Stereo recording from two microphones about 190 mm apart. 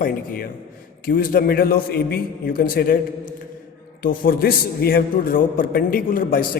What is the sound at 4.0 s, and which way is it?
Speech, 50° left (ahead or behind).